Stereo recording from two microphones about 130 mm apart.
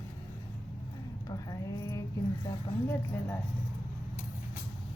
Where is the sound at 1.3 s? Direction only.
25° left (ahead or behind).